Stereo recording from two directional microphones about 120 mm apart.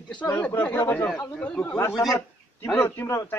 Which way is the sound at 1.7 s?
25° left (ahead or behind).